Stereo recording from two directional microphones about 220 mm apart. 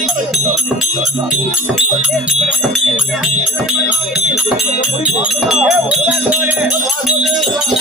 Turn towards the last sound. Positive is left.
turn(degrees=-5)  # may be behind; listen again after turning